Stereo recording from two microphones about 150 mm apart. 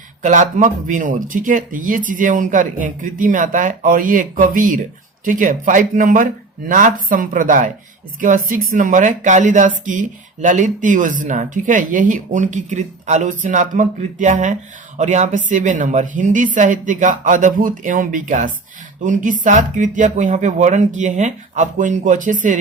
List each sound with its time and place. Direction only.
0.2 s speech: 55° right (ahead or behind)